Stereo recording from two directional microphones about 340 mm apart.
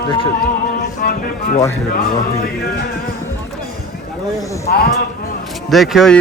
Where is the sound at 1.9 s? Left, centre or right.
Left.